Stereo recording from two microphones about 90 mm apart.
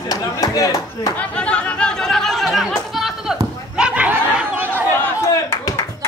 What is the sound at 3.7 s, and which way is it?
Snicker, 15° right (ahead or behind).